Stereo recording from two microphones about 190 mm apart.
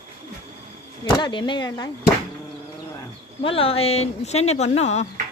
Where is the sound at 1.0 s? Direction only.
25° left (ahead or behind).